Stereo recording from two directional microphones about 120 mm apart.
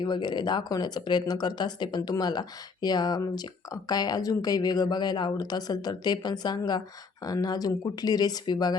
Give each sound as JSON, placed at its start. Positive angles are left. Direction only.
{"t": 0.0, "sound": "speech", "side_deg": 40}